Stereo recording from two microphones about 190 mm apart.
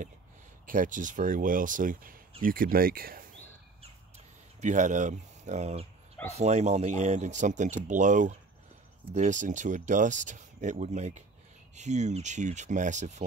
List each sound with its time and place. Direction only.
0.7 s speech: 45° right (ahead or behind)
4.6 s speech: 40° right (ahead or behind)